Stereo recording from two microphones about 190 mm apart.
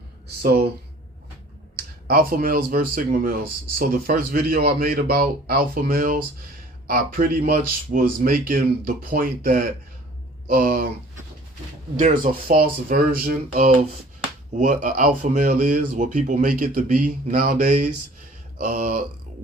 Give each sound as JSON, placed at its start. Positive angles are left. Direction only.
{"t": 0.4, "sound": "speech", "side_deg": -55}
{"t": 1.7, "sound": "speech", "side_deg": -50}
{"t": 11.9, "sound": "speech", "side_deg": -45}